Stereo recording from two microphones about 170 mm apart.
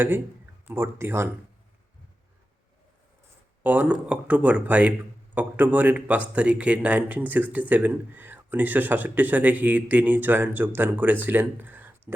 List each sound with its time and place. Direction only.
0.7 s speech: 15° right (ahead or behind)
3.6 s speech: 10° right (ahead or behind)